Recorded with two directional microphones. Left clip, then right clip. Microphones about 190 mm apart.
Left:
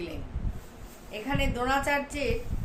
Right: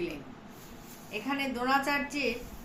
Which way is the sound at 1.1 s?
15° left (ahead or behind).